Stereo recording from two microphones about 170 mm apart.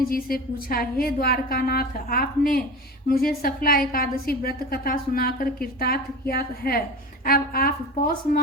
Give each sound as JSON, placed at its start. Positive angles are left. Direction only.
{"t": 0.1, "sound": "a woman's voice", "side_deg": 60}